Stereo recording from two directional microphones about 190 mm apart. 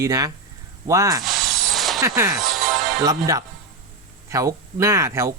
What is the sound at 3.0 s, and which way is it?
Speech, 20° right (ahead or behind).